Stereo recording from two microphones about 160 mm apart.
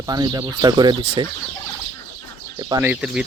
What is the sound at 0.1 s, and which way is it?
Speech, 25° right (ahead or behind).